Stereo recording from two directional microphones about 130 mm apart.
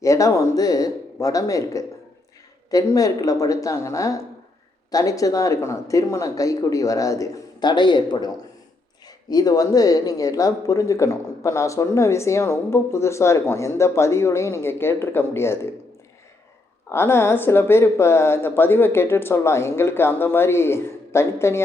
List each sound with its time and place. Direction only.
0.0 s speech: 25° left (ahead or behind)
9.3 s speech: 30° left (ahead or behind)
16.9 s speech: 20° left (ahead or behind)